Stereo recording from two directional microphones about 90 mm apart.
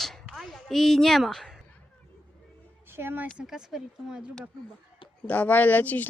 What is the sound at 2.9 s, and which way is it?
Speech, 25° right (ahead or behind).